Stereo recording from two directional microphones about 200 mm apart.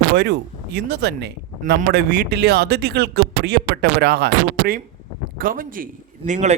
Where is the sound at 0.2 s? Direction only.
55° right (ahead or behind).